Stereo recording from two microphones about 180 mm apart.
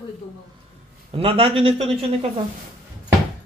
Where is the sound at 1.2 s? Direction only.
30° right (ahead or behind).